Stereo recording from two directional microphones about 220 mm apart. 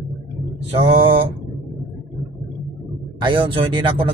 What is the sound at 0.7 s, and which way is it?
Speech, 25° right (ahead or behind).